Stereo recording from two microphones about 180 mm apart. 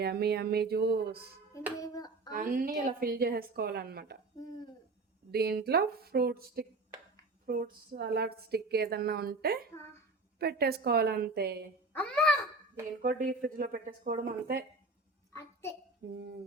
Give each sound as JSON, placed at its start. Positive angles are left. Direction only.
{"t": 0.0, "sound": "a woman's voice", "side_deg": -60}
{"t": 1.8, "sound": "hands", "side_deg": 20}
{"t": 2.3, "sound": "a woman's voice", "side_deg": -50}
{"t": 4.4, "sound": "a sound", "side_deg": 20}
{"t": 5.3, "sound": "a woman's voice", "side_deg": -60}
{"t": 11.9, "sound": "a child's voice", "side_deg": 5}
{"t": 13.0, "sound": "speech", "side_deg": -50}
{"t": 16.0, "sound": "a woman's voice", "side_deg": -60}